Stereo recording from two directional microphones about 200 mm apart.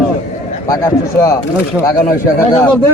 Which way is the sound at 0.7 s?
15° left (ahead or behind).